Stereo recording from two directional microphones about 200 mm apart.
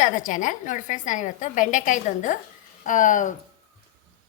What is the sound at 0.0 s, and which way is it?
A woman's voice, 40° left (ahead or behind).